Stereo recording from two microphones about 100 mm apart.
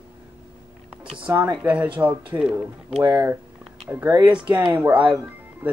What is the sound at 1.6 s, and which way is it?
Speech, 15° right (ahead or behind).